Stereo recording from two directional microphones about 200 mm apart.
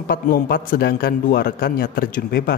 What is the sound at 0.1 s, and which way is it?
Speech, 45° left (ahead or behind).